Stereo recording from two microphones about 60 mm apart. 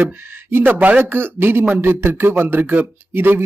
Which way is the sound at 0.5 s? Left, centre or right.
Right.